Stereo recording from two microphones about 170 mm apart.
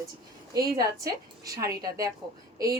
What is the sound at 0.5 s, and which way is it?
A woman's voice, 20° right (ahead or behind).